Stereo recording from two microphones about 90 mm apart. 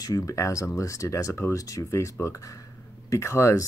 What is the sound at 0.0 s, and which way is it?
Speech, 40° left (ahead or behind).